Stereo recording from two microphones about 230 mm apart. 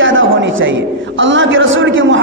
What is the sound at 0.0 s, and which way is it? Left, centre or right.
A man's voice, right.